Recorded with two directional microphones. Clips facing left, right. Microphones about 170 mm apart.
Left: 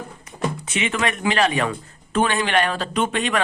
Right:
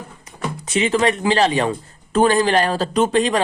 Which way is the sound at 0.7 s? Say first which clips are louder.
Right 9 dB; 35° right (ahead or behind).